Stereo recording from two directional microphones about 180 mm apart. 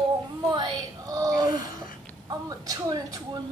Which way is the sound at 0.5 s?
20° right (ahead or behind).